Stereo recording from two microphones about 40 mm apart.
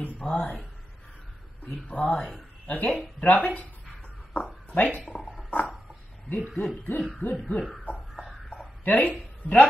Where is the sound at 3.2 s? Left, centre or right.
Left.